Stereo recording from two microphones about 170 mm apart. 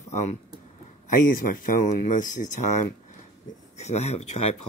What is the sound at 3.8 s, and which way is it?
Speech, 40° left (ahead or behind).